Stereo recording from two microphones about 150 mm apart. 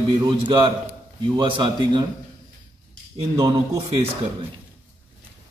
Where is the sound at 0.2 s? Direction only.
35° right (ahead or behind).